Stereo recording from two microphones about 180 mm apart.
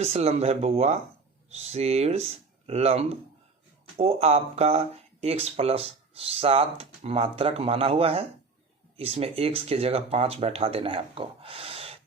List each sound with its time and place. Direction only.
0.0 s speech: 35° right (ahead or behind)